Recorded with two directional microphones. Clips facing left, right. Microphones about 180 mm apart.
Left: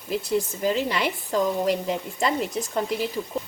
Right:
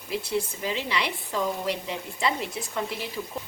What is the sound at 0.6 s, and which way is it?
Speech, 45° left (ahead or behind).